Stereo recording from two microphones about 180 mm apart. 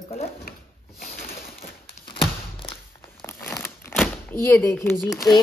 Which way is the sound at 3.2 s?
10° left (ahead or behind).